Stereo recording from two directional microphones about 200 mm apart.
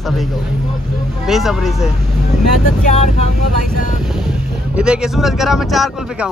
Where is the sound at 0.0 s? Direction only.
Centre (ahead or behind).